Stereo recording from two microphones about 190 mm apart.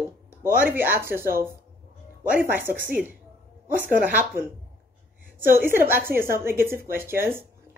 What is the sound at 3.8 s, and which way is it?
Speech, 10° right (ahead or behind).